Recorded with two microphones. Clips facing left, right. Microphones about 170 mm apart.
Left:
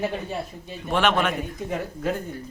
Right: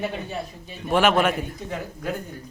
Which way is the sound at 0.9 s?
5° right (ahead or behind).